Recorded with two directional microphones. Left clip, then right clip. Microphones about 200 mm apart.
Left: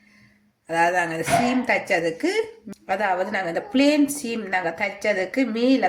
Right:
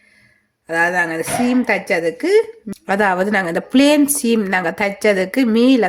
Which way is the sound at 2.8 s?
50° right (ahead or behind).